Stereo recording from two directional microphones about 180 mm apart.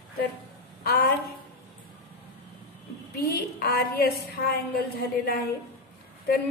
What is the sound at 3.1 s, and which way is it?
A woman's voice, 60° left (ahead or behind).